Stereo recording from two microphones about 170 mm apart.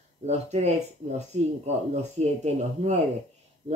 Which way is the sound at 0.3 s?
40° right (ahead or behind).